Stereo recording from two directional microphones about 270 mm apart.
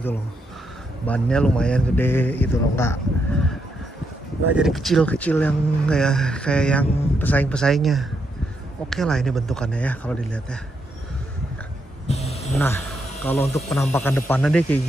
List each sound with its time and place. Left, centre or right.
1.0 s speech: centre
4.6 s speech: centre
12.1 s a sound: left
12.5 s speech: centre